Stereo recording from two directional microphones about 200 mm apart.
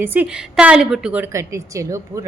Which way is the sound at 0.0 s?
10° right (ahead or behind).